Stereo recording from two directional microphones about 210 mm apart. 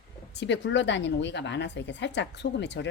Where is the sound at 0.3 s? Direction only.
55° left (ahead or behind).